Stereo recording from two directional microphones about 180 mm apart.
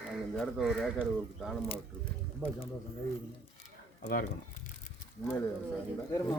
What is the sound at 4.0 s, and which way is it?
Speech, 50° left (ahead or behind).